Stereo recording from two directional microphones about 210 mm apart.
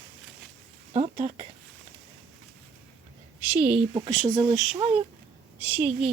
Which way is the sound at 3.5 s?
5° right (ahead or behind).